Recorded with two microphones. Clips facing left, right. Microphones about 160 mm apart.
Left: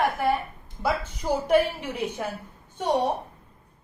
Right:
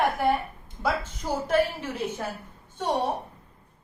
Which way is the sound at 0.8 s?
10° left (ahead or behind).